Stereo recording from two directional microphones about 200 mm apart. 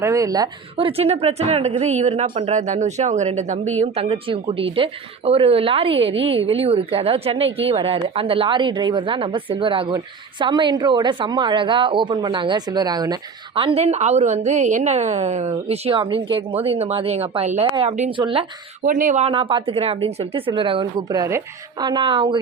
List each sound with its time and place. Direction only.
0.0 s a woman's voice: 15° right (ahead or behind)
18.9 s speech: 40° right (ahead or behind); by 22.4 s 25° right (ahead or behind)